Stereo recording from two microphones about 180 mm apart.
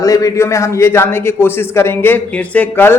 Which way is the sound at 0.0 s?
20° left (ahead or behind).